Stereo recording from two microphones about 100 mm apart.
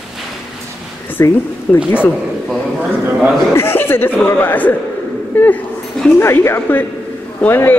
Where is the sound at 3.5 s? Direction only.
20° left (ahead or behind).